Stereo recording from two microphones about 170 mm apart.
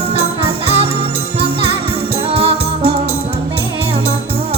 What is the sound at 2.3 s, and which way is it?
Music, 35° right (ahead or behind).